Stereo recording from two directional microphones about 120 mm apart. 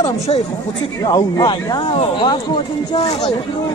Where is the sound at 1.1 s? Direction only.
35° left (ahead or behind).